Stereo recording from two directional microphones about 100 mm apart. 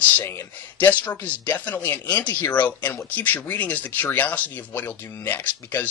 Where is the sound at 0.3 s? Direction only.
20° left (ahead or behind).